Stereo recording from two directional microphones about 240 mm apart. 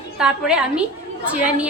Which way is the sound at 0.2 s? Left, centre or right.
Centre.